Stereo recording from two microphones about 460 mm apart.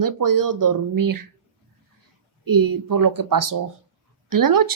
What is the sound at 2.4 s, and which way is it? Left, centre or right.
Speech, right.